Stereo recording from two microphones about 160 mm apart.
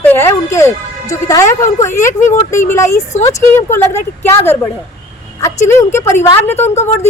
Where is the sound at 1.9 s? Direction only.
50° left (ahead or behind).